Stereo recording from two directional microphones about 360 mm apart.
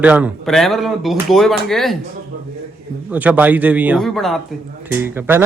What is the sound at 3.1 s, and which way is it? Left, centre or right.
Speech, centre.